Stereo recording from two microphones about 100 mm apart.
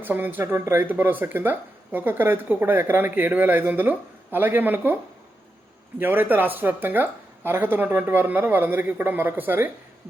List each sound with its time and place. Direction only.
0.0 s speech: 20° right (ahead or behind)
6.0 s speech: 20° right (ahead or behind)